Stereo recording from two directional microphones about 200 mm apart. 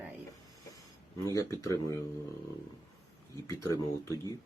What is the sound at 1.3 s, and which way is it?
Speech, 15° left (ahead or behind).